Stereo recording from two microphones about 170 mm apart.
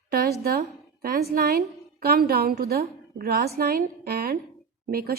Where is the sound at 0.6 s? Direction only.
55° right (ahead or behind).